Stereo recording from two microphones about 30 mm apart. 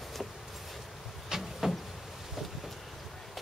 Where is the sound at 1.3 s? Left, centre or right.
Right.